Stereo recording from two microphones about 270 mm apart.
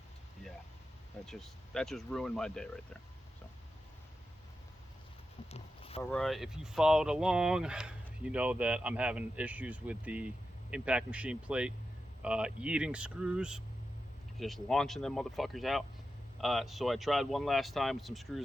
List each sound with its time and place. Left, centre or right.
1.2 s speech: centre
5.5 s a sound: left
6.0 s speech: centre